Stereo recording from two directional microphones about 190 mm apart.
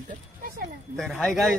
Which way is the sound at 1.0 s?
Centre (ahead or behind).